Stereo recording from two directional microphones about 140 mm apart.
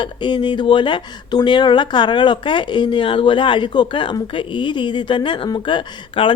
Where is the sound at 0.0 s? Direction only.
35° left (ahead or behind).